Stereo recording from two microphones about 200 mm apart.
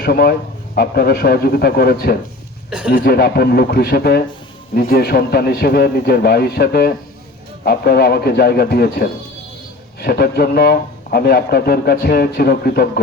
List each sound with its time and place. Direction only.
0.0 s a man's voice: 55° left (ahead or behind)
2.6 s speech: 5° right (ahead or behind)
2.9 s a man's voice: 55° left (ahead or behind)